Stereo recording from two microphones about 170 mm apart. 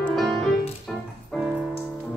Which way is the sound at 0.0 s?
Centre (ahead or behind).